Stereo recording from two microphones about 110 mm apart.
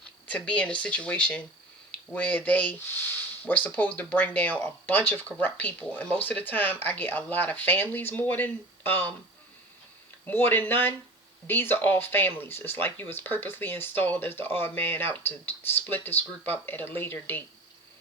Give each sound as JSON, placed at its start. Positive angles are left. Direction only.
{"t": 0.3, "sound": "speech", "side_deg": 15}
{"t": 10.2, "sound": "speech", "side_deg": 20}